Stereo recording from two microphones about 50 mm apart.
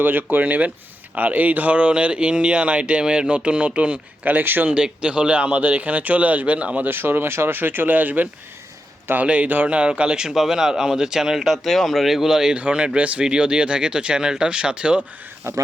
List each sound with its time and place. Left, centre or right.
0.0 s speech: right
4.6 s speech: right
6.8 s speech: right; by 12.5 s centre
12.5 s speech: right
15.5 s speech: right